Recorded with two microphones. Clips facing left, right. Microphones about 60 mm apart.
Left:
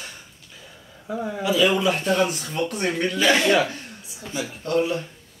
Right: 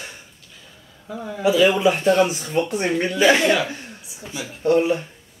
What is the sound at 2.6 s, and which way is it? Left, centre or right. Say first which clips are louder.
Speech: right 5 dB; right.